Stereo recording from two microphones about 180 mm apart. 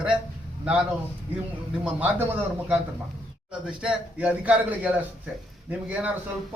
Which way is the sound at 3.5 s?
5° right (ahead or behind).